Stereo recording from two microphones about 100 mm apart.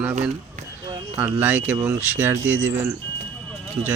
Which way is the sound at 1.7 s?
35° right (ahead or behind).